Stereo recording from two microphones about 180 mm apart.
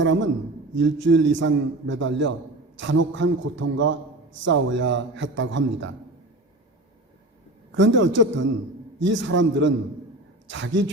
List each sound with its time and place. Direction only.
0.0 s a man's voice: 90° right
7.7 s a man's voice: 90° right